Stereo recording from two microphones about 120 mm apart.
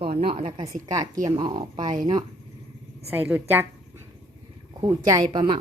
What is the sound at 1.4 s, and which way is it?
Speech, 45° right (ahead or behind).